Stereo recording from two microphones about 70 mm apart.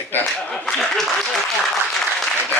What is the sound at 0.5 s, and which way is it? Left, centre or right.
Speech, centre.